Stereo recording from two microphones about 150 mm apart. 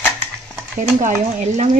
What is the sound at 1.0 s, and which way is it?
Speech, 50° right (ahead or behind).